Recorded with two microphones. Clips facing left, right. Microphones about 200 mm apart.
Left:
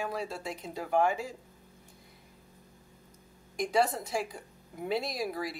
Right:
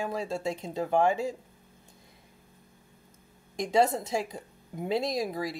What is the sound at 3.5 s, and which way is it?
Speech, 25° right (ahead or behind).